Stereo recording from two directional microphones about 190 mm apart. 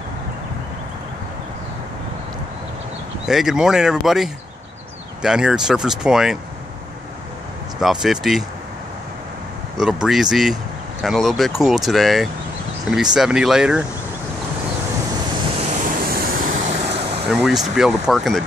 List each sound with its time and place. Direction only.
3.3 s speech: centre (ahead or behind)
7.8 s speech: 5° right (ahead or behind)
10.3 s speech: centre (ahead or behind)
15.6 s vehicle: 40° right (ahead or behind)
17.3 s speech: centre (ahead or behind)